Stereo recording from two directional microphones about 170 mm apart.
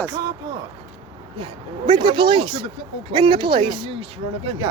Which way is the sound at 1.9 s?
25° right (ahead or behind).